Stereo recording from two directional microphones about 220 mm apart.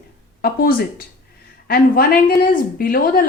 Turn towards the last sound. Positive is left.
turn(degrees=40)  # may be behind; listen again after turning